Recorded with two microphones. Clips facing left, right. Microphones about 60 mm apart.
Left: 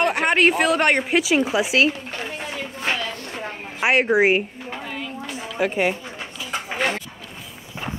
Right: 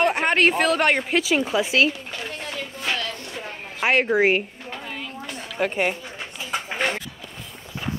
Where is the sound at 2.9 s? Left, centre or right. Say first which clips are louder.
Left 2 dB; left.